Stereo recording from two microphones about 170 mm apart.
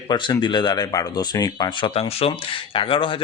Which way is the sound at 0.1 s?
25° left (ahead or behind).